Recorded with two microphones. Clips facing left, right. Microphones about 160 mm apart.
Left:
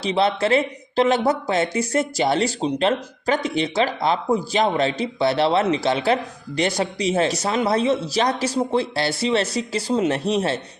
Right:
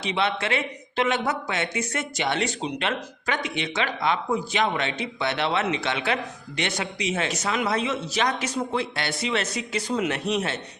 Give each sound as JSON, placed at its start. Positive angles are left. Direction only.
{"t": 0.0, "sound": "speech", "side_deg": 35}